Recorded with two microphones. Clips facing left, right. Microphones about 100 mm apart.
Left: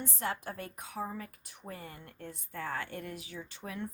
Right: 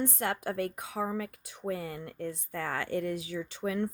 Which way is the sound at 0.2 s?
80° right.